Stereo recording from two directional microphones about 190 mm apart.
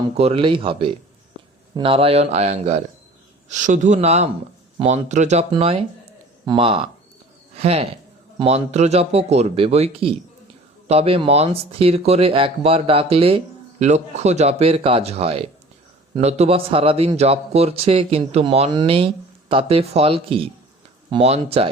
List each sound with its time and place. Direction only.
0.2 s speech: 30° right (ahead or behind)